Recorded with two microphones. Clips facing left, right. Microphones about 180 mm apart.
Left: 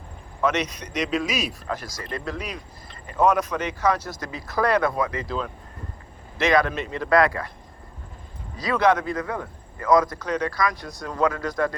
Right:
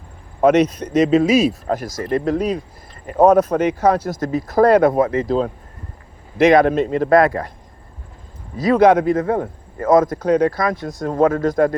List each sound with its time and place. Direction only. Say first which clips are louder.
0.4 s speech: right 11 dB; 55° right (ahead or behind)
1.0 s speech: right 12 dB; 25° right (ahead or behind)
1.7 s speech: right 11 dB; 50° right (ahead or behind)
6.3 s speech: right 9 dB; 50° right (ahead or behind)
8.5 s speech: right 8 dB; 50° right (ahead or behind)
9.1 s speech: right 10 dB; 25° right (ahead or behind)
9.4 s speech: right 9 dB; 50° right (ahead or behind)
10.6 s speech: right 5 dB; 25° right (ahead or behind)
11.0 s speech: right 8 dB; 50° right (ahead or behind)